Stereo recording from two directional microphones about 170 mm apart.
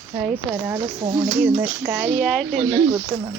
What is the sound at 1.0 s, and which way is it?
Speech, 30° right (ahead or behind).